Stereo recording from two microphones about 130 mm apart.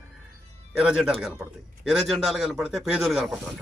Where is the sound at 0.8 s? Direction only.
5° right (ahead or behind).